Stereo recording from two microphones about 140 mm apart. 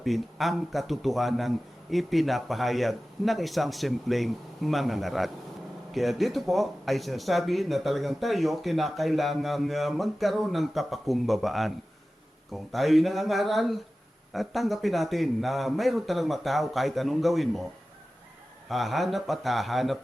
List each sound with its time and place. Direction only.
0.0 s speech: centre (ahead or behind)
18.7 s speech: centre (ahead or behind)